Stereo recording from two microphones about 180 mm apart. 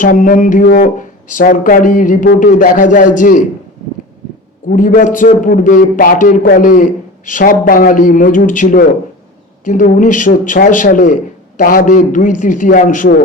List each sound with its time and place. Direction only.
0.0 s a man's voice: 50° left (ahead or behind)
4.7 s a man's voice: 50° left (ahead or behind)